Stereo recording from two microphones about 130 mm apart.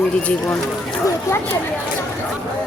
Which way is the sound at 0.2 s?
10° left (ahead or behind).